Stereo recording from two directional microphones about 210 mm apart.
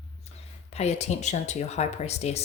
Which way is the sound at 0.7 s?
30° left (ahead or behind).